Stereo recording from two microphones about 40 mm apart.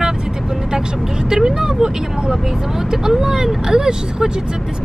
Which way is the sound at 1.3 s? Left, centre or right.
Centre.